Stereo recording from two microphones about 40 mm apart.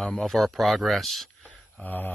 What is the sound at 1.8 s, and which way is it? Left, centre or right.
Speech, left.